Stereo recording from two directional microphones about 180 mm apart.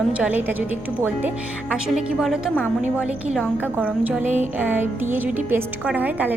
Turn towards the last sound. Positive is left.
turn(degrees=-10)  # may be behind; listen again after turning